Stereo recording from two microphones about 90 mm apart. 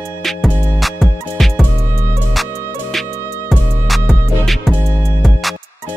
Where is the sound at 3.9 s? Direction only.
Centre (ahead or behind).